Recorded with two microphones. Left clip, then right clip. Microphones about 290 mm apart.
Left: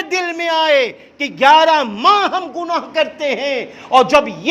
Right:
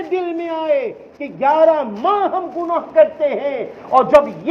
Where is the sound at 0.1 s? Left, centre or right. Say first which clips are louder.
Left 4 dB; left.